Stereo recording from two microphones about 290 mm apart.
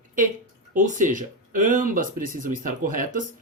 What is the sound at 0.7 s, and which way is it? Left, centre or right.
Speech, right.